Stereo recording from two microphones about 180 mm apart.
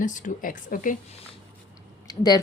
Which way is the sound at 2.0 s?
20° left (ahead or behind).